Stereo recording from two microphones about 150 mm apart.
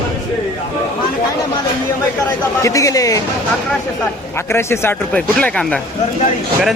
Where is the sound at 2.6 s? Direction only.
20° left (ahead or behind).